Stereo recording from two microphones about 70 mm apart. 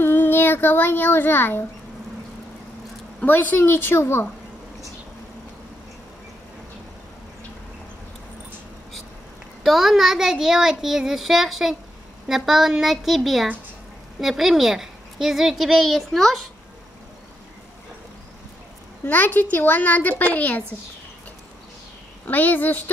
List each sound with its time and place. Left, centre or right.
0.0 s speech: left
3.2 s a woman's voice: left
9.6 s a woman's voice: centre
19.0 s a woman's voice: left
22.2 s a woman's voice: left